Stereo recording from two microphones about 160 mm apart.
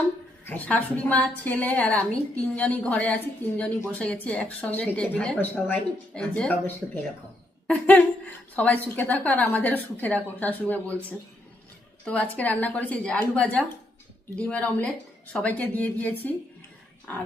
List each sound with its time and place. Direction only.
0.4 s a woman's voice: 10° left (ahead or behind)
12.0 s a woman's voice: 10° left (ahead or behind)